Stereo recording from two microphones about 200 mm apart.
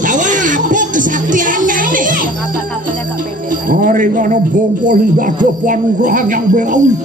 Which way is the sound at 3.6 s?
40° right (ahead or behind).